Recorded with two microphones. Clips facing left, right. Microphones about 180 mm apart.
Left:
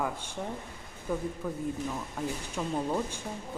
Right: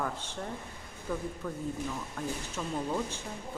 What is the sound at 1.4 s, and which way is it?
Speech, 15° left (ahead or behind).